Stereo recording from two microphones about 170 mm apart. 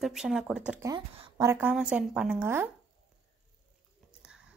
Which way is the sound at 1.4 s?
15° right (ahead or behind).